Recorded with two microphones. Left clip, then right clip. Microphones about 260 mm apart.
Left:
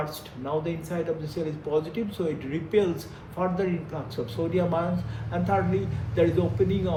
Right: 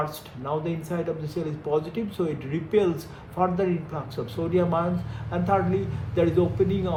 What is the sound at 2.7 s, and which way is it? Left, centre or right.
Speech, right.